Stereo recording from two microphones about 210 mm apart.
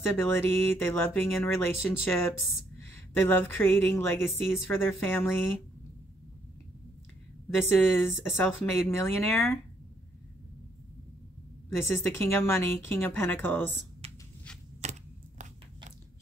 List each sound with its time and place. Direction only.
0.1 s speech: 10° left (ahead or behind)
7.6 s speech: 10° left (ahead or behind)
11.8 s speech: 10° left (ahead or behind)
14.8 s a sound: 35° right (ahead or behind)